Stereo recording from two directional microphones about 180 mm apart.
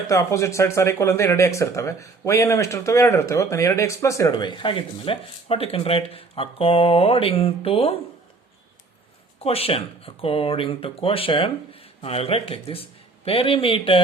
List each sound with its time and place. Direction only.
0.1 s speech: 15° left (ahead or behind); by 7.9 s 30° left (ahead or behind)
9.4 s speech: 35° left (ahead or behind)